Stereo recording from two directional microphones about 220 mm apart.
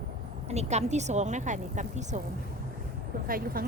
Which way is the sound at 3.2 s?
40° right (ahead or behind).